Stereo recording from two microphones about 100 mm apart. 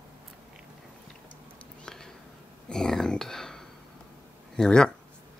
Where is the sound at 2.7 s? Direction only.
5° left (ahead or behind).